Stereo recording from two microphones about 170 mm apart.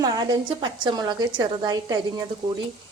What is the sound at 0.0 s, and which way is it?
A woman's voice, 25° right (ahead or behind).